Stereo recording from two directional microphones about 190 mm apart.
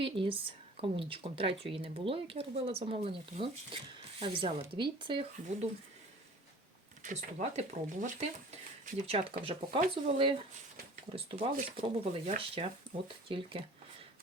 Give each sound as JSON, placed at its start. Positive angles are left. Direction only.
{"t": 0.0, "sound": "a woman's voice", "side_deg": -30}
{"t": 7.0, "sound": "a woman's voice", "side_deg": -40}